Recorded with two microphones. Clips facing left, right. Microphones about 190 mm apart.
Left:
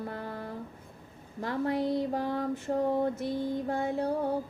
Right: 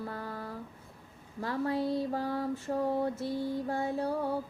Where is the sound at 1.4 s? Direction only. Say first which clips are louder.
Left 2 dB; 20° left (ahead or behind).